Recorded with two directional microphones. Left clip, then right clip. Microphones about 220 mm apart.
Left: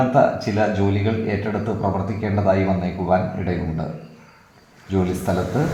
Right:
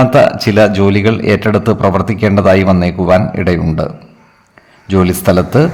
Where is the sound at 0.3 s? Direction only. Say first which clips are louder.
Right 11 dB; 45° right (ahead or behind).